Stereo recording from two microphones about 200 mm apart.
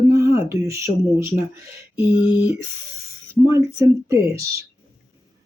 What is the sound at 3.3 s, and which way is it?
Speech, 15° right (ahead or behind).